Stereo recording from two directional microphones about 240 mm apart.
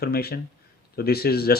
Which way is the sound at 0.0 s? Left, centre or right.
Left.